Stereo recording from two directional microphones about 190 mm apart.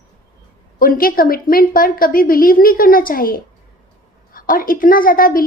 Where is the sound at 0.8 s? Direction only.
45° left (ahead or behind).